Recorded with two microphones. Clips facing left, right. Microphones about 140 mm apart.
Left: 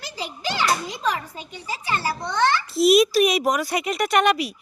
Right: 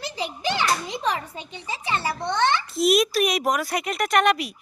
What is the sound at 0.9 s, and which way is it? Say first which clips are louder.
A child's voice: even; 25° right (ahead or behind).